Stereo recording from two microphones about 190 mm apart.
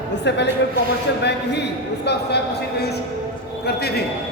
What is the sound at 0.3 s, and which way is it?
A man's voice, 65° left (ahead or behind).